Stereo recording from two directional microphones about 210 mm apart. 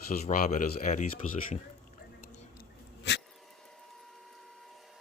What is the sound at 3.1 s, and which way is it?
Dog, 55° left (ahead or behind).